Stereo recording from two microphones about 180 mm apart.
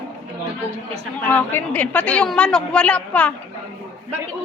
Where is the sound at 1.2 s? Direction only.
10° left (ahead or behind).